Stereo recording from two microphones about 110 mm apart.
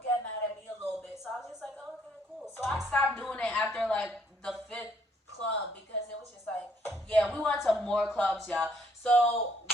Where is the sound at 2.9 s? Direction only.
5° left (ahead or behind).